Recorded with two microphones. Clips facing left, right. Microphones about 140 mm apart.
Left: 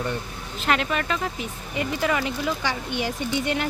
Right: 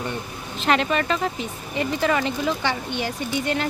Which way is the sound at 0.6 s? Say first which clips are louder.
Right 3 dB; 5° left (ahead or behind).